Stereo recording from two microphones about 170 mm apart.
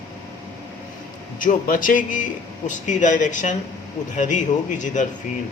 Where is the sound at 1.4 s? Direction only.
55° left (ahead or behind).